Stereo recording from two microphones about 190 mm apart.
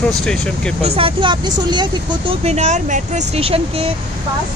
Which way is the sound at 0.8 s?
30° right (ahead or behind).